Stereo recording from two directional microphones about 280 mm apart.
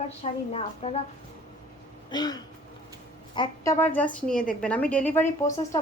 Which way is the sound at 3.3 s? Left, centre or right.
Centre.